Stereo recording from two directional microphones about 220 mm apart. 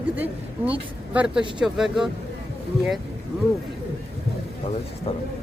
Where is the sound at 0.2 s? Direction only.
5° right (ahead or behind).